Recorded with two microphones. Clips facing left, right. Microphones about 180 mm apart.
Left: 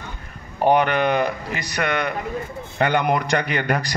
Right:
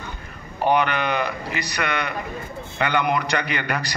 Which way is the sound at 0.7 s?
45° left (ahead or behind).